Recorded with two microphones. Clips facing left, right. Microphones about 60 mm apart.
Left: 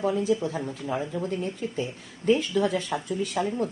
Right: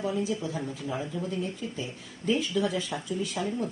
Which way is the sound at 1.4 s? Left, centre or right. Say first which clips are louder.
Left 3 dB; left.